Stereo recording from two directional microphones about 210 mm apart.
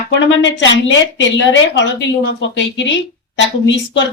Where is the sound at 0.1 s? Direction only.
60° left (ahead or behind).